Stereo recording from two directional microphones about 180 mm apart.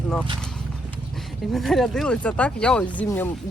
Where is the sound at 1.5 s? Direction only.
Centre (ahead or behind).